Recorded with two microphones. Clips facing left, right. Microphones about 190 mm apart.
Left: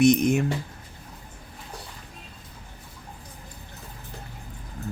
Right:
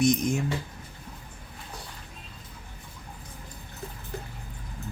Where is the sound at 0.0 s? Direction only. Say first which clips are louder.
Left 5 dB; 60° left (ahead or behind).